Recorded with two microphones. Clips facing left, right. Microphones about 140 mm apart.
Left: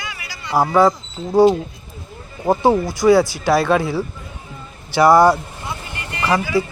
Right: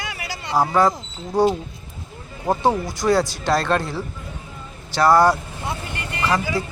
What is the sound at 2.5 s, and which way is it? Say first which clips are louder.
Speech: left 4 dB; 5° left (ahead or behind).